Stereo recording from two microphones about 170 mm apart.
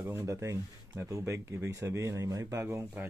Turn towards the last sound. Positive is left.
turn(degrees=-15)  # may be behind; listen again after turning